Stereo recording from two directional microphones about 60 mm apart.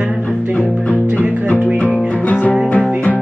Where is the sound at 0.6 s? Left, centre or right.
Left.